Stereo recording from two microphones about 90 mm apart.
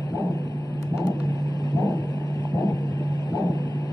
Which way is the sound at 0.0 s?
45° left (ahead or behind).